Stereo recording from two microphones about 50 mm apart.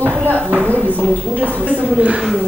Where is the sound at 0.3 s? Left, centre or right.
Right.